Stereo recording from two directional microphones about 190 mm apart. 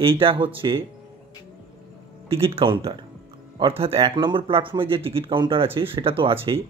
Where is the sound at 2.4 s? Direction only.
30° right (ahead or behind).